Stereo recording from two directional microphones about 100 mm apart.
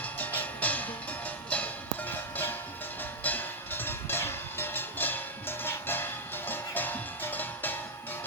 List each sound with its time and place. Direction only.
0.0 s music: 15° left (ahead or behind)